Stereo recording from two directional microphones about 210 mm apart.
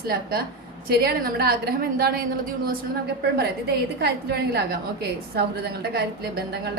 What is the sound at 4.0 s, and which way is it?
A woman's voice, 50° right (ahead or behind).